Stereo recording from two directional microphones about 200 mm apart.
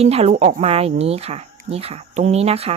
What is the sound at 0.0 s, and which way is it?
Speech, 30° right (ahead or behind).